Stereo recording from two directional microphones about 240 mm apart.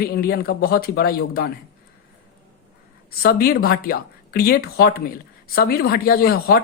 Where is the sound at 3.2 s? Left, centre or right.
Left.